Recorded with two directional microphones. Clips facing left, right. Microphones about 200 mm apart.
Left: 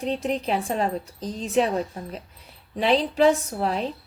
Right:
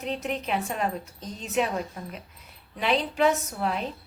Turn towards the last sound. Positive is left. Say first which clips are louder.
# left 3 dB
turn(degrees=30)  # may be behind; listen again after turning